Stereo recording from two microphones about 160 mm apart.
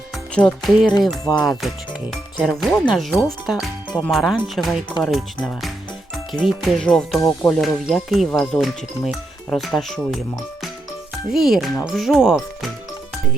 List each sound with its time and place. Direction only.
0.3 s speech: 5° left (ahead or behind)
0.9 s speech: 25° left (ahead or behind)
1.5 s speech: centre (ahead or behind)
11.3 s speech: centre (ahead or behind)